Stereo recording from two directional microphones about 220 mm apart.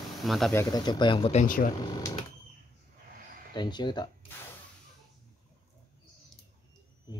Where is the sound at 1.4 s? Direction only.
40° left (ahead or behind).